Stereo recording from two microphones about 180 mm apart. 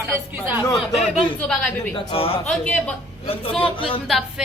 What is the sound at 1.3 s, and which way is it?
Speech, 10° left (ahead or behind).